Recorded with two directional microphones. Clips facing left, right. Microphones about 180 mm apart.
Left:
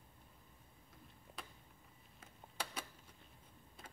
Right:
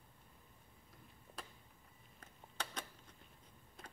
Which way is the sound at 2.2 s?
10° left (ahead or behind).